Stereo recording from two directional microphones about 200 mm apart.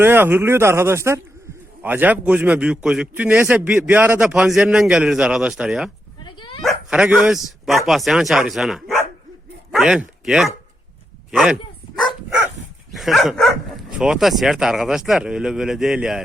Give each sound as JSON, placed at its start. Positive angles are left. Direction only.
{"t": 0.0, "sound": "a man's voice", "side_deg": -10}
{"t": 6.2, "sound": "dog", "side_deg": 25}
{"t": 6.6, "sound": "a man's voice", "side_deg": 0}
{"t": 12.9, "sound": "a man's voice", "side_deg": 0}